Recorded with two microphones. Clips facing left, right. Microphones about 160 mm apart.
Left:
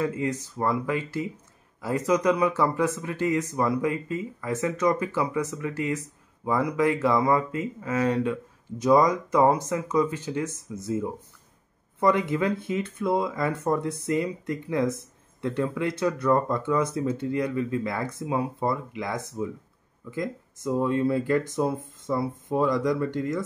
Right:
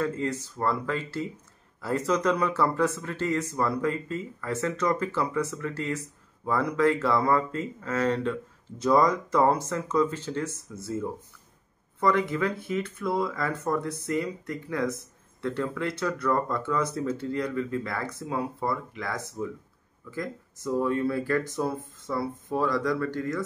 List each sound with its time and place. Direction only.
0.0 s speech: 15° left (ahead or behind)